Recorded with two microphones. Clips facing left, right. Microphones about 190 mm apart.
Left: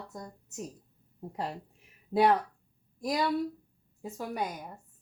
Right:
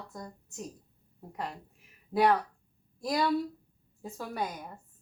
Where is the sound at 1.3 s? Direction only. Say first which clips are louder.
Left 2 dB; 30° left (ahead or behind).